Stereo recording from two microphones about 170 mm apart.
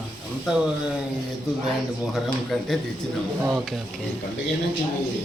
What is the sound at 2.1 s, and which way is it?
Speech, centre (ahead or behind).